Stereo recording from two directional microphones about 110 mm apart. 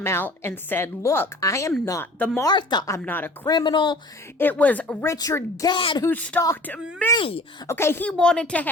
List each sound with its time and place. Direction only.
0.0 s a woman's voice: 20° left (ahead or behind)
2.4 s a woman's voice: 40° left (ahead or behind)
3.0 s speech: 15° left (ahead or behind)
3.4 s speech: 40° left (ahead or behind)
4.4 s speech: 15° left (ahead or behind)
5.0 s a woman's voice: 30° left (ahead or behind)
5.7 s speech: 50° left (ahead or behind)
6.1 s speech: 15° left (ahead or behind)
7.2 s speech: 60° left (ahead or behind)
7.7 s a woman's voice: 25° left (ahead or behind)
8.0 s speech: 5° left (ahead or behind)